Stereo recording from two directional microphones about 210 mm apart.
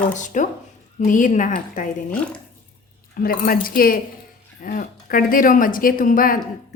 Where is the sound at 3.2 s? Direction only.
45° left (ahead or behind).